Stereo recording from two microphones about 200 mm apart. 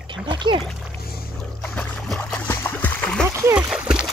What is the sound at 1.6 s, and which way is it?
Splash, 5° left (ahead or behind).